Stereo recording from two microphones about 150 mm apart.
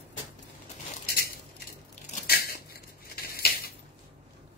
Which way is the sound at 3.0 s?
90° left.